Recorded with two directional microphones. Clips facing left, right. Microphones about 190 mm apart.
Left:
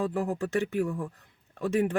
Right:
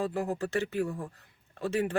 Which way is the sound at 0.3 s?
15° left (ahead or behind).